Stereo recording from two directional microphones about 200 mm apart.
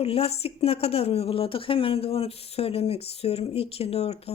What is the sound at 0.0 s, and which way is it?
Speech, 30° left (ahead or behind).